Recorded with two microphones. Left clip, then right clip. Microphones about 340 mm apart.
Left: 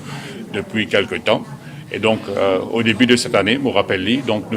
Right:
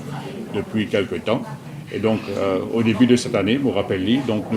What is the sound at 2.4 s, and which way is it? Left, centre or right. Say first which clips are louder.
Speech: left 4 dB; left.